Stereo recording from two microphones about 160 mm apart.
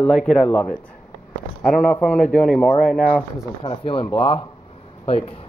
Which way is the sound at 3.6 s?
35° left (ahead or behind).